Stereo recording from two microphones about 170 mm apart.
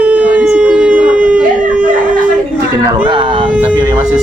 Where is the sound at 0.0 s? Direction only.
10° right (ahead or behind).